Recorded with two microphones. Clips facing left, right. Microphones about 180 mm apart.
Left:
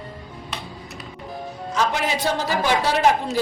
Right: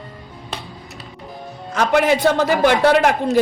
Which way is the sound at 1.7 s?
60° right (ahead or behind).